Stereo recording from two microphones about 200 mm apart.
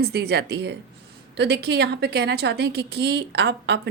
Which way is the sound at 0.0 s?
55° right (ahead or behind).